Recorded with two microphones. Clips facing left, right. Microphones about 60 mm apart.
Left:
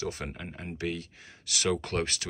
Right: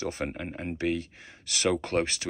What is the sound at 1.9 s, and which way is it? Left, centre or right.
Speech, right.